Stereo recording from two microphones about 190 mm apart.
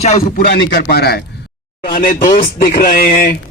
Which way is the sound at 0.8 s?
55° left (ahead or behind).